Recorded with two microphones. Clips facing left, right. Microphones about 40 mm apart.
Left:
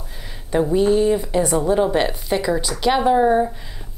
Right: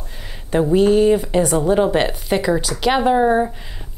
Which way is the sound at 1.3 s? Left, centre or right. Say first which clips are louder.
Right 2 dB; centre.